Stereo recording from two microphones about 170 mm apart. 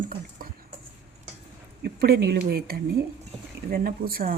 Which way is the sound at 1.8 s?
65° right (ahead or behind).